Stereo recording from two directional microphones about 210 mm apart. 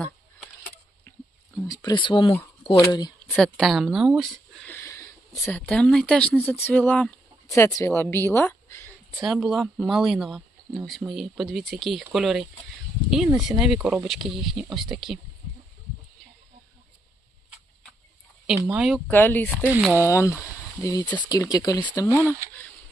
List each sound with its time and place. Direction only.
1.6 s speech: 20° left (ahead or behind)
3.3 s speech: centre (ahead or behind)
8.1 s a sound: 10° left (ahead or behind)
9.2 s speech: centre (ahead or behind)
18.4 s speech: 5° right (ahead or behind)
19.7 s speech: 10° right (ahead or behind)
20.1 s speech: 15° left (ahead or behind)